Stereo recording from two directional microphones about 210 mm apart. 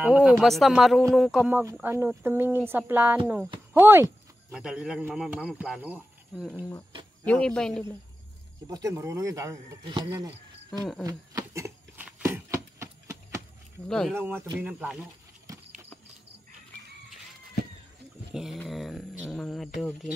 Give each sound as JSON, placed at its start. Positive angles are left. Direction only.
{"t": 0.0, "sound": "speech", "side_deg": -5}
{"t": 8.6, "sound": "speech", "side_deg": -15}
{"t": 11.1, "sound": "a sound", "side_deg": -15}
{"t": 13.8, "sound": "speech", "side_deg": 5}
{"t": 14.1, "sound": "speech", "side_deg": -10}
{"t": 18.3, "sound": "speech", "side_deg": 0}